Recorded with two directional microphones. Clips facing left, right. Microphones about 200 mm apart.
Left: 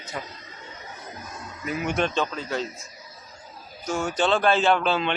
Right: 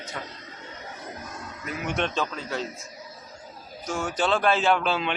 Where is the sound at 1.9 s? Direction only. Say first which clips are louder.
Left 1 dB; centre (ahead or behind).